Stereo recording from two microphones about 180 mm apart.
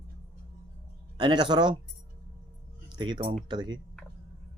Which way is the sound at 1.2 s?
25° right (ahead or behind).